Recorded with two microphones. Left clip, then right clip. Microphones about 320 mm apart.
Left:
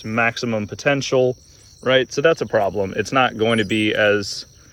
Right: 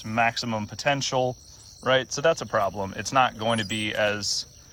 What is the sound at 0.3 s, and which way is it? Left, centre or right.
Speech, centre.